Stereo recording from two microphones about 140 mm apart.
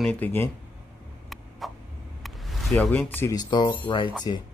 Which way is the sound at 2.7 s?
10° left (ahead or behind).